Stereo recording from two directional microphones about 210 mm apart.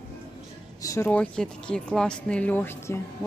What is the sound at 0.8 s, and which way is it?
Speech, 15° left (ahead or behind).